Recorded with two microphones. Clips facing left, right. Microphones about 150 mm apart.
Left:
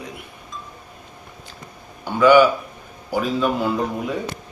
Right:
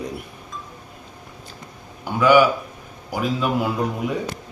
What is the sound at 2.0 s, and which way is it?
A man's voice, 10° right (ahead or behind).